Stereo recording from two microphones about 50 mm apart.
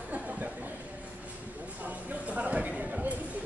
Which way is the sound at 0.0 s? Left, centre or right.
Right.